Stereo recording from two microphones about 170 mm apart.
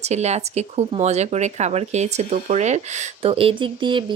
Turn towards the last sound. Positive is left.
turn(degrees=-30)  # may be behind; listen again after turning